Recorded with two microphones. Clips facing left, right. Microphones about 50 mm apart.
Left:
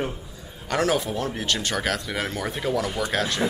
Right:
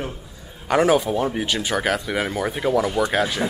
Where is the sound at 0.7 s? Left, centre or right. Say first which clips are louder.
Right 6 dB; centre.